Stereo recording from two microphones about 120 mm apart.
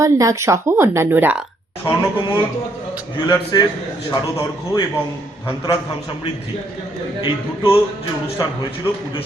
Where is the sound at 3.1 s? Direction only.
40° left (ahead or behind).